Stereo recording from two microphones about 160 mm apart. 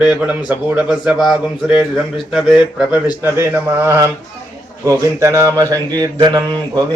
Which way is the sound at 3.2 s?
15° right (ahead or behind).